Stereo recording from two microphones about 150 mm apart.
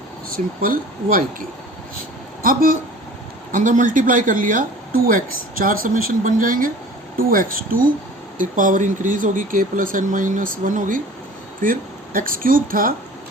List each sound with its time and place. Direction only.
0.3 s speech: 75° right (ahead or behind)
2.4 s speech: 65° right (ahead or behind)